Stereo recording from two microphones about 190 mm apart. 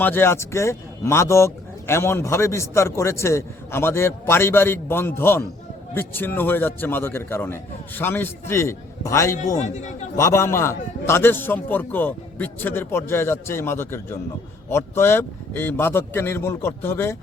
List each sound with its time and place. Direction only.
0.0 s a man's voice: 10° left (ahead or behind)
9.6 s a man's voice: 40° left (ahead or behind)
10.2 s a man's voice: 15° left (ahead or behind)